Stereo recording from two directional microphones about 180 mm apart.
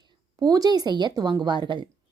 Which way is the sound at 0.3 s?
20° right (ahead or behind).